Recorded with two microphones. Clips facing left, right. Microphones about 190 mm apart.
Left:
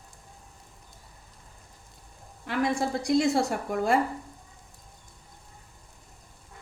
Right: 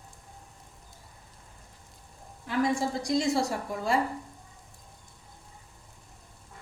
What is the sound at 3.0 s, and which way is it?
Speech, 60° left (ahead or behind).